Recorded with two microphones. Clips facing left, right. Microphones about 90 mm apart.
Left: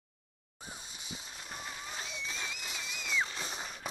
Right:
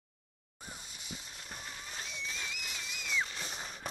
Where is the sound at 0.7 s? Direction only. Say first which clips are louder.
Left 1 dB; 20° left (ahead or behind).